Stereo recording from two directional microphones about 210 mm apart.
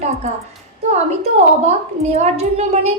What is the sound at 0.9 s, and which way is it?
A woman's voice, 30° right (ahead or behind).